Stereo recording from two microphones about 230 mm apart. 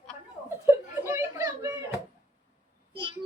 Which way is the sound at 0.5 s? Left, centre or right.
Centre.